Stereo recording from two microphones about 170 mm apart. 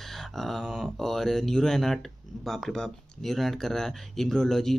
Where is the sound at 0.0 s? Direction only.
Centre (ahead or behind).